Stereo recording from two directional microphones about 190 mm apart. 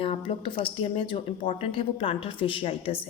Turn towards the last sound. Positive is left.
turn(degrees=30)  # may be behind; listen again after turning